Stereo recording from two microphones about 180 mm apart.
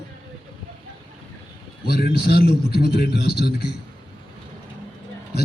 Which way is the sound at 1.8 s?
60° left (ahead or behind).